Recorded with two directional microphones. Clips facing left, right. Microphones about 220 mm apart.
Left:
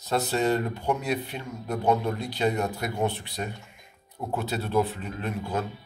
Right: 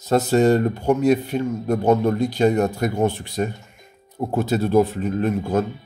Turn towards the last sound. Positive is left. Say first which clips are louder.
# right 10 dB
turn(degrees=-45)  # may be behind; listen again after turning